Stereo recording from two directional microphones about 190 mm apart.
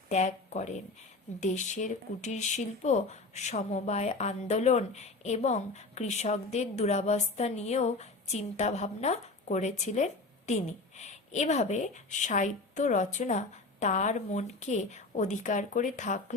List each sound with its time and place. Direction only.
0.1 s speech: 35° left (ahead or behind)